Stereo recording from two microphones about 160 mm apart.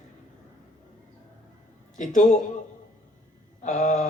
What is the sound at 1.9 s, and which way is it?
Speech, 50° left (ahead or behind).